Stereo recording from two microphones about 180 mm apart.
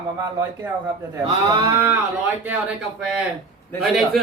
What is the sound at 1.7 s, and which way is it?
Speech, 10° right (ahead or behind).